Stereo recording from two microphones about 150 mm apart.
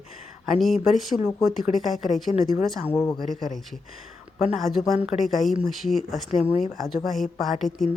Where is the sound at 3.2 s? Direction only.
Centre (ahead or behind).